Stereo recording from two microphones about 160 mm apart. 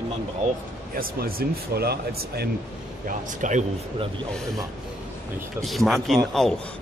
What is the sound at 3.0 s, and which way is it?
Speech, 50° right (ahead or behind).